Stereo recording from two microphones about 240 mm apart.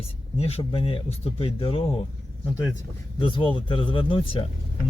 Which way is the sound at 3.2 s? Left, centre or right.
Centre.